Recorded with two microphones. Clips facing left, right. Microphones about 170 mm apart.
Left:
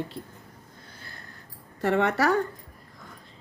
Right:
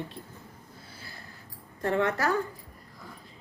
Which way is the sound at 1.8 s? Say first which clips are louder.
Left 3 dB; 80° left.